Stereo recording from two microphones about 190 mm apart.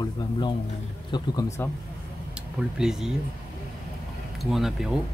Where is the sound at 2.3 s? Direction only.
5° right (ahead or behind).